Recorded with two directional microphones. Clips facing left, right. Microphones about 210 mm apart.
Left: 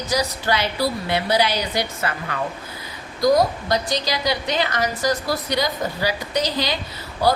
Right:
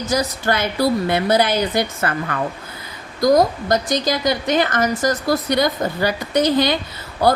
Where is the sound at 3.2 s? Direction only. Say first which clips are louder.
Right 3 dB; 45° right (ahead or behind).